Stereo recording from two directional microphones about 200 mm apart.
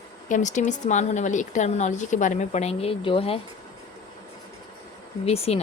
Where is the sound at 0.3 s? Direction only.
40° left (ahead or behind).